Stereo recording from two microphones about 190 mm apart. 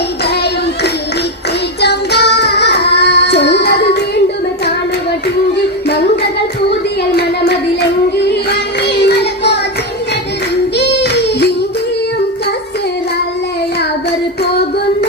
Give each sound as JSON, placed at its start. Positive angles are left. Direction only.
{"t": 1.8, "sound": "child singing", "side_deg": 60}
{"t": 7.2, "sound": "a sound", "side_deg": 60}
{"t": 8.9, "sound": "child singing", "side_deg": 60}
{"t": 10.8, "sound": "child singing", "side_deg": 60}